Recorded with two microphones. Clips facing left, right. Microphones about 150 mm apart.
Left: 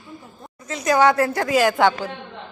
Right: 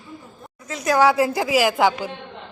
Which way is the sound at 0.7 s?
Centre (ahead or behind).